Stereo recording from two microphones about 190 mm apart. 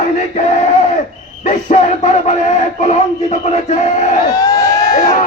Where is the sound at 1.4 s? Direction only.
40° left (ahead or behind).